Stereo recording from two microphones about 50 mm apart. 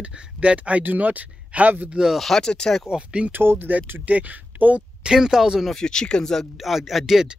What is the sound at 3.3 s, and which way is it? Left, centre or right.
Speech, right.